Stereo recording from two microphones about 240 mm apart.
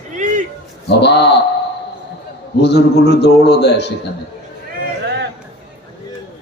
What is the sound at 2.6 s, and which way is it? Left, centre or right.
A man's voice, left.